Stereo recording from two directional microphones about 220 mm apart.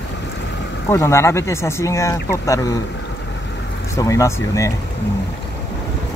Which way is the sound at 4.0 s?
15° left (ahead or behind).